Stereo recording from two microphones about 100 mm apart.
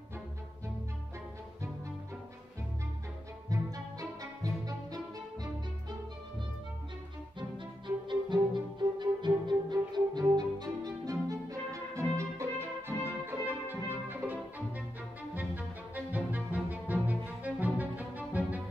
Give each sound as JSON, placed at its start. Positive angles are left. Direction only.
{"t": 3.4, "sound": "music", "side_deg": -35}
{"t": 7.3, "sound": "music", "side_deg": -50}